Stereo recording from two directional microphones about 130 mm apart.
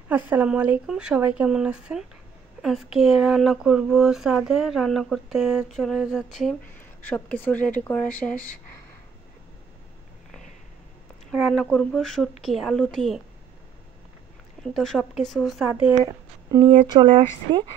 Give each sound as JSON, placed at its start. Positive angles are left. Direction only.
{"t": 0.3, "sound": "speech", "side_deg": -10}
{"t": 7.1, "sound": "speech", "side_deg": 15}
{"t": 11.5, "sound": "speech", "side_deg": 5}
{"t": 14.6, "sound": "speech", "side_deg": 5}
{"t": 15.6, "sound": "speech", "side_deg": -10}
{"t": 15.9, "sound": "speech", "side_deg": -25}
{"t": 16.6, "sound": "speech", "side_deg": -35}